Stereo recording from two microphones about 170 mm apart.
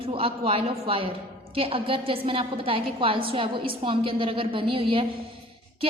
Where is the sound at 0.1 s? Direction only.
35° right (ahead or behind).